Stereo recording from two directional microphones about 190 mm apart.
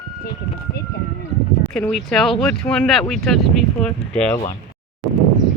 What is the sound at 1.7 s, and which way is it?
Speech, 5° left (ahead or behind).